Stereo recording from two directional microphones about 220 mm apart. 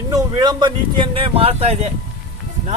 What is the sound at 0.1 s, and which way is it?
A man's voice, 15° right (ahead or behind).